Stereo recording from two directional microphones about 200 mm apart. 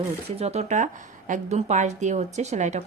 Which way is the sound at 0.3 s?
30° right (ahead or behind).